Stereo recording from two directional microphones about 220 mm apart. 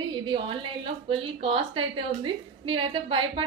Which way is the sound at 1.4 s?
25° right (ahead or behind).